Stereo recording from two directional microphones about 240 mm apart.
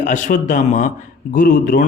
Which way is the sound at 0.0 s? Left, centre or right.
Left.